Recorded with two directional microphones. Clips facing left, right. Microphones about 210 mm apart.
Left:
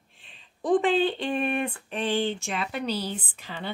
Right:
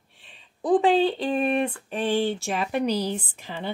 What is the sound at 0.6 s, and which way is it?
Speech, 5° right (ahead or behind).